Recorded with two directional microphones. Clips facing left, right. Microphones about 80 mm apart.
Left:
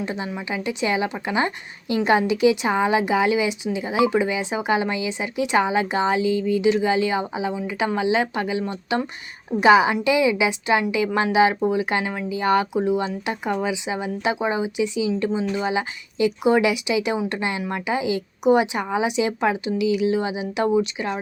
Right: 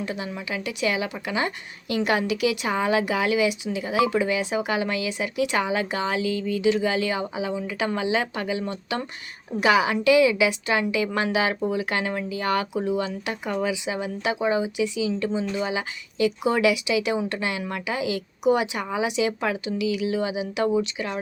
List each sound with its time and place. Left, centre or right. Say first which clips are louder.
0.0 s a woman's voice: left 3 dB; left